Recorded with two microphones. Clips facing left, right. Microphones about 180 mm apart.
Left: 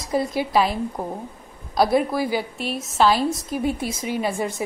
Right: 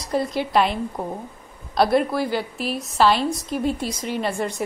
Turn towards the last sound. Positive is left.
turn(degrees=0)  # may be behind; listen again after turning